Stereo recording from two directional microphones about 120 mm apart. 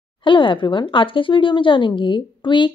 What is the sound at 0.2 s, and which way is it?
A woman's voice, 45° left (ahead or behind).